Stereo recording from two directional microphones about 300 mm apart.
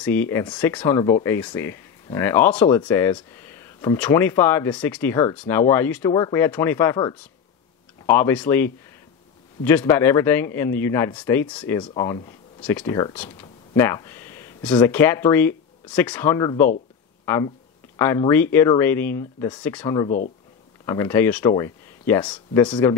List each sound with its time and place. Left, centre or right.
0.0 s speech: centre
17.2 s a sound: centre
17.9 s speech: centre
20.1 s speech: left
20.8 s speech: centre